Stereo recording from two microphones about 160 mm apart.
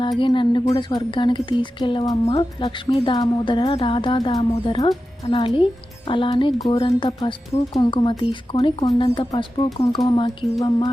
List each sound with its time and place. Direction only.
0.2 s speech: 30° left (ahead or behind)